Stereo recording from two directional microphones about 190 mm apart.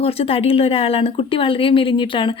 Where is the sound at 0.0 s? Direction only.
30° left (ahead or behind).